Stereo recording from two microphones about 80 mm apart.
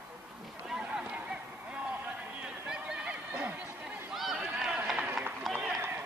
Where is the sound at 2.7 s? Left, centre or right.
Centre.